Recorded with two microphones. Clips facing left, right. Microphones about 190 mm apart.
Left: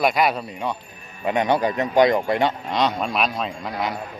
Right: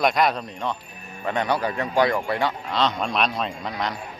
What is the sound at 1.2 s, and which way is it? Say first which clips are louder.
Speech: left 4 dB; 15° left (ahead or behind).